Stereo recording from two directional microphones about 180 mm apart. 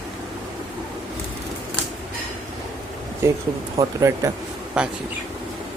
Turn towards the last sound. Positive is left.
turn(degrees=-5)  # may be behind; listen again after turning